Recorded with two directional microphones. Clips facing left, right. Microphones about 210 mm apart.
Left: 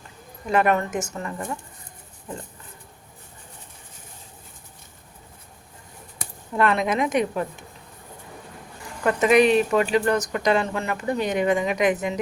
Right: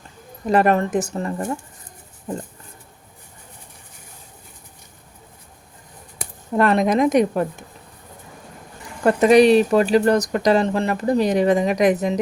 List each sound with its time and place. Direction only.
0.4 s speech: 35° right (ahead or behind)
6.5 s speech: 40° right (ahead or behind)
9.0 s speech: 35° right (ahead or behind)